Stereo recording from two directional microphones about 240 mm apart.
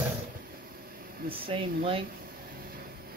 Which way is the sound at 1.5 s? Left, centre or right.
Right.